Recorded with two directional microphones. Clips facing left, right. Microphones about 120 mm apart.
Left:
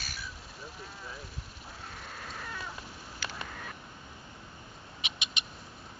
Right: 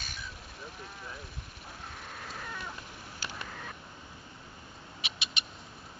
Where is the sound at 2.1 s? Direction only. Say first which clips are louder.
Even; 5° right (ahead or behind).